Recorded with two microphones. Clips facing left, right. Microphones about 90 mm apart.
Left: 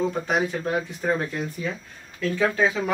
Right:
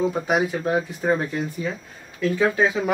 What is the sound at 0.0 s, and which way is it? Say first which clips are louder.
Speech: right 2 dB; 10° right (ahead or behind).